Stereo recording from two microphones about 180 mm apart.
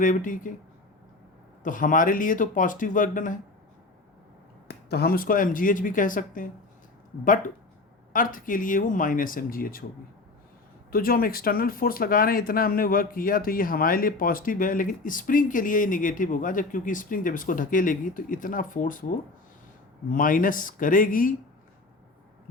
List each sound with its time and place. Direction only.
0.0 s speech: 45° left (ahead or behind)
1.6 s speech: 50° left (ahead or behind)
4.7 s speech: 60° left (ahead or behind)
8.1 s speech: 50° left (ahead or behind)
10.9 s speech: 55° left (ahead or behind)